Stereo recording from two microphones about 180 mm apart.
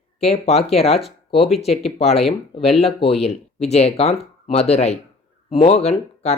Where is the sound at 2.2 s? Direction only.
35° left (ahead or behind).